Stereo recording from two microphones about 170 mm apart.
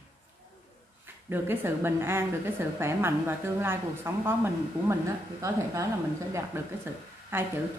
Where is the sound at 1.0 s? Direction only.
10° right (ahead or behind).